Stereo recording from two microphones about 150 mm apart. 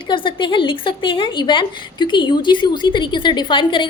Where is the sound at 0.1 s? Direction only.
35° left (ahead or behind).